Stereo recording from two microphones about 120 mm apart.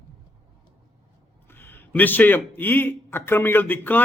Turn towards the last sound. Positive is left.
turn(degrees=15)  # may be behind; listen again after turning